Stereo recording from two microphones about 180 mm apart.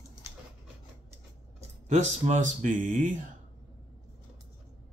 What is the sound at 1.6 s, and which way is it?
Speech, 40° right (ahead or behind).